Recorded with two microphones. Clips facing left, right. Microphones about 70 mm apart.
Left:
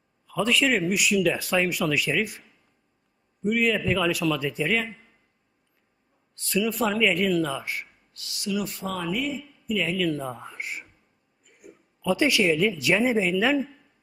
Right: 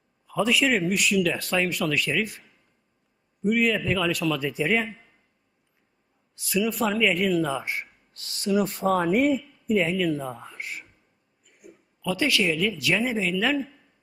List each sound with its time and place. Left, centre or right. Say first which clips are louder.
0.3 s speech: even; centre
3.4 s speech: right 1 dB; centre
6.3 s speech: even; centre
7.5 s speech: right 2 dB; right
9.7 s speech: right 3 dB; right
10.1 s speech: right 1 dB; centre
10.6 s a man's voice: left 1 dB; centre
12.0 s speech: left 3 dB; centre